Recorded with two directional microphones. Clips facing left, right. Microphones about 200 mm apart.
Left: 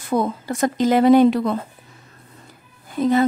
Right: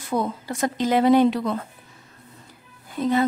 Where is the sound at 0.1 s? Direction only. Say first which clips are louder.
Left 4 dB; 50° left (ahead or behind).